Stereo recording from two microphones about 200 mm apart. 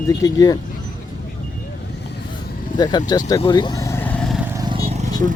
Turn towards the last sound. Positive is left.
turn(degrees=-30)  # may be behind; listen again after turning